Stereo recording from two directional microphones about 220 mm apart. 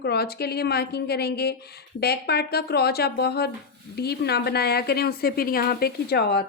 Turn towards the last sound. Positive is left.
turn(degrees=45)  # may be behind; listen again after turning